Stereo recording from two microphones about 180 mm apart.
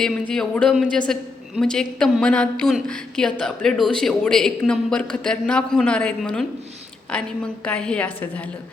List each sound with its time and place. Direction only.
0.0 s a woman's voice: 5° left (ahead or behind)